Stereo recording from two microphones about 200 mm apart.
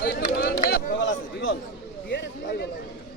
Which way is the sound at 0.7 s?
65° left (ahead or behind).